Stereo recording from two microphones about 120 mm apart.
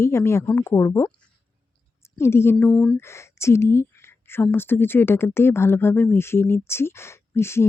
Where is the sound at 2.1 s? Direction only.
20° left (ahead or behind).